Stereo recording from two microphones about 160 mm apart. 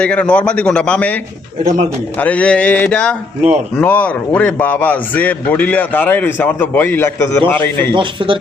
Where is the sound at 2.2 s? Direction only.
10° left (ahead or behind).